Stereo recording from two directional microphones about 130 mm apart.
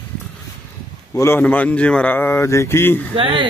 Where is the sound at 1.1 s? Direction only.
15° left (ahead or behind).